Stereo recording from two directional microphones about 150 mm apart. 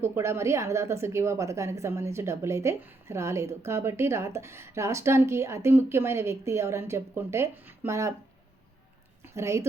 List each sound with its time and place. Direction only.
0.0 s a woman's voice: 15° right (ahead or behind)
9.2 s a woman's voice: 20° right (ahead or behind)